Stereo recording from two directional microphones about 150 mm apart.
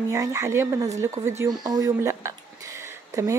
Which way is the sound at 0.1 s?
20° right (ahead or behind).